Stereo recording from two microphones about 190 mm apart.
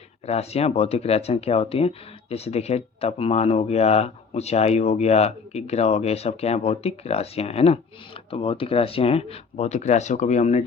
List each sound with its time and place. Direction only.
0.3 s speech: 35° left (ahead or behind)